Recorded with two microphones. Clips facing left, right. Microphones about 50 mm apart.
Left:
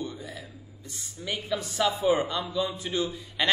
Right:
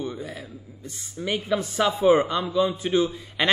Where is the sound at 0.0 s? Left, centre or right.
Right.